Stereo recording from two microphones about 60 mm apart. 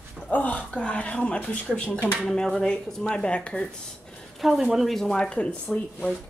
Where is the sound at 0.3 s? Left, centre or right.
Left.